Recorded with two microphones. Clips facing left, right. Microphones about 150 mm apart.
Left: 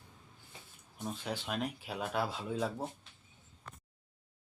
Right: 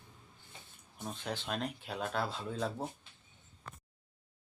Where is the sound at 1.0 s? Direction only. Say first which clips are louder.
Left 1 dB; 5° left (ahead or behind).